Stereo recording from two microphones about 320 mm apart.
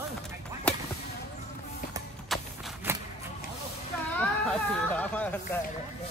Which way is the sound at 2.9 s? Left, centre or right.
Centre.